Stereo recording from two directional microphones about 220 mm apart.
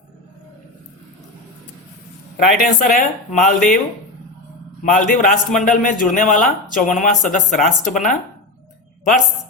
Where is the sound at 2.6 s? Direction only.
40° left (ahead or behind).